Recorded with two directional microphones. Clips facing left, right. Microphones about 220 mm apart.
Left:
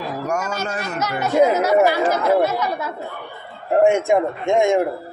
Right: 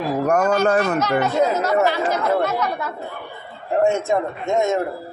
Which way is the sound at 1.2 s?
15° left (ahead or behind).